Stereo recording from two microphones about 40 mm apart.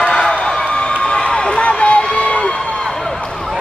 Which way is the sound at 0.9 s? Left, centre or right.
Left.